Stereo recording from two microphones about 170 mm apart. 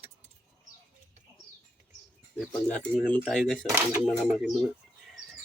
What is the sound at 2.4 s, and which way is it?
Speech, 10° left (ahead or behind).